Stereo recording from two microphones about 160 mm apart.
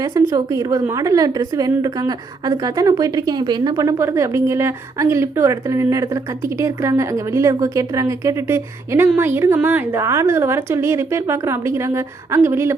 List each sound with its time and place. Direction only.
0.0 s a woman's voice: 20° right (ahead or behind)